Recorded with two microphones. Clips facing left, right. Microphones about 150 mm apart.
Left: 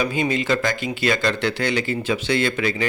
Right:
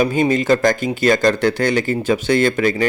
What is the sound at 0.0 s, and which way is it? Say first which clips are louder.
Speech: right 6 dB; 45° right (ahead or behind).